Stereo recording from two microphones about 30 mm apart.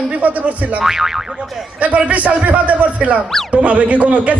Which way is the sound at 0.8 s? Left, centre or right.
Centre.